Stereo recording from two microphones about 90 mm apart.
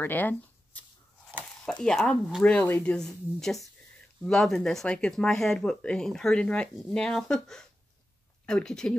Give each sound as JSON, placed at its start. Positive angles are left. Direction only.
{"t": 0.0, "sound": "speech", "side_deg": 20}